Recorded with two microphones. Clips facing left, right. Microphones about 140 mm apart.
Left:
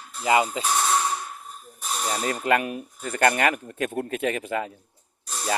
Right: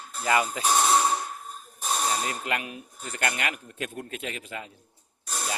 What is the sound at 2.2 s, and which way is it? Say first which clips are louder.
Speech: left 8 dB; 45° left (ahead or behind).